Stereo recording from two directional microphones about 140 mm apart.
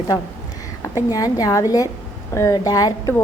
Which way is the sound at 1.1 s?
25° left (ahead or behind).